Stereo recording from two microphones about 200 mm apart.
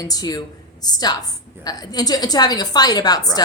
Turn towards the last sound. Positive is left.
turn(degrees=20)  # may be behind; listen again after turning